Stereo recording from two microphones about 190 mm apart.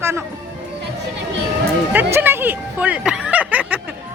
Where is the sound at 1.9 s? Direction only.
10° right (ahead or behind).